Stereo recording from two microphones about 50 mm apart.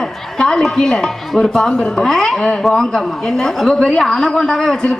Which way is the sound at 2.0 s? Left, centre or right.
Centre.